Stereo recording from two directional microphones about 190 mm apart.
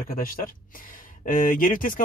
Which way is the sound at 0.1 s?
45° left (ahead or behind).